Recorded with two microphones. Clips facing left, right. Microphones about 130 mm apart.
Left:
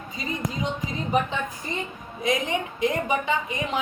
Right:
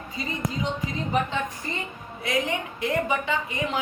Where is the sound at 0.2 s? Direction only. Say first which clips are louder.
Even; 20° left (ahead or behind).